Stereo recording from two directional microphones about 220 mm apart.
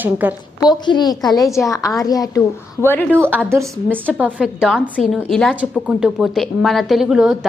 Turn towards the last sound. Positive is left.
turn(degrees=0)  # may be behind; listen again after turning